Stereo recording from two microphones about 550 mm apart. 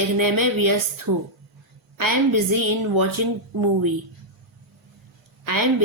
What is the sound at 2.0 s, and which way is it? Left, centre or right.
Speech, right.